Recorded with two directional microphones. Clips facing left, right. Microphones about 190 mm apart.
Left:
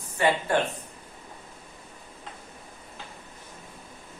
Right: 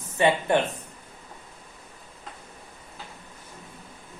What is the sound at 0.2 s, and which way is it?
Speech, 20° right (ahead or behind).